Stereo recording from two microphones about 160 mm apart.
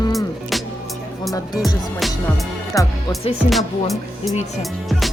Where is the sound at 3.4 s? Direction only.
Centre (ahead or behind).